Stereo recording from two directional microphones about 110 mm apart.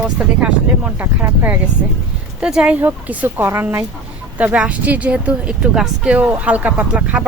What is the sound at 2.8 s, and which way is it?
Speech, 20° right (ahead or behind).